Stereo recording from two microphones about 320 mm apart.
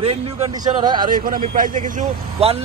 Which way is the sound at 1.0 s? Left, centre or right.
Right.